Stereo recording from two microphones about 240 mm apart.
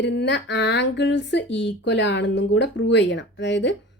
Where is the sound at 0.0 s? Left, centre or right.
Left.